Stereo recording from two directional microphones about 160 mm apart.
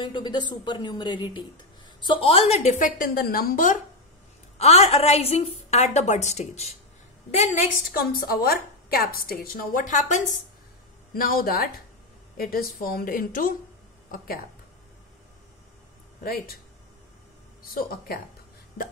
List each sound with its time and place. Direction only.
0.0 s a woman's voice: 30° left (ahead or behind); by 3.8 s 55° left (ahead or behind)
4.6 s a woman's voice: 40° left (ahead or behind)
7.9 s a woman's voice: 65° left (ahead or behind); by 10.2 s 50° left (ahead or behind)
11.1 s a woman's voice: 65° left (ahead or behind)
16.2 s a woman's voice: 70° left (ahead or behind)
17.7 s a woman's voice: 70° left (ahead or behind)